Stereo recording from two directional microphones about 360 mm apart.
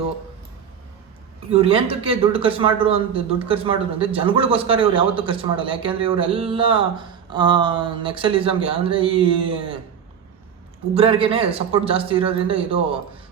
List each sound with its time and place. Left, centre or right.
1.5 s a man's voice: centre
10.9 s a man's voice: centre